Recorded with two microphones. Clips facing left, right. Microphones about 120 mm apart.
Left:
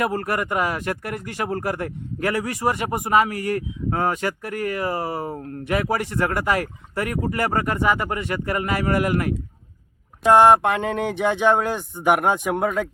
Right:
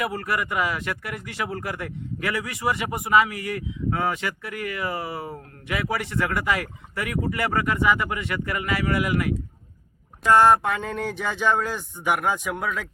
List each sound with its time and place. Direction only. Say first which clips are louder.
0.0 s speech: left 3 dB; 45° left (ahead or behind)
10.2 s speech: left 3 dB; 60° left (ahead or behind)